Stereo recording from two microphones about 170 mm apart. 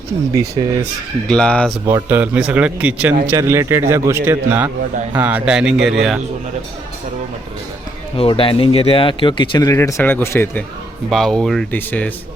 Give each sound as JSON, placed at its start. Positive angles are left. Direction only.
{"t": 1.3, "sound": "speech", "side_deg": 5}
{"t": 1.9, "sound": "a man's voice", "side_deg": -15}
{"t": 8.1, "sound": "speech", "side_deg": 30}